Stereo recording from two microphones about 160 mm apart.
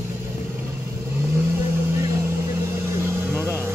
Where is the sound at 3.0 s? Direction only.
15° right (ahead or behind).